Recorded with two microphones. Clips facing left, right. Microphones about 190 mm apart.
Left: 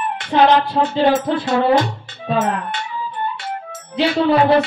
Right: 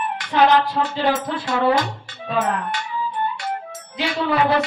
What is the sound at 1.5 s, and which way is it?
Speech, 30° left (ahead or behind).